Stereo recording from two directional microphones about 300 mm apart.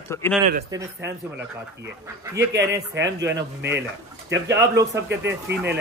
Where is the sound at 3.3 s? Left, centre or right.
Right.